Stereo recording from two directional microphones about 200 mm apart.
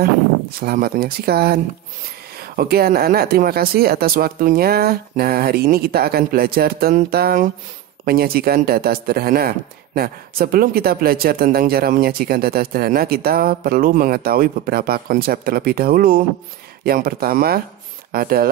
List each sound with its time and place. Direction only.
0.6 s speech: 50° right (ahead or behind)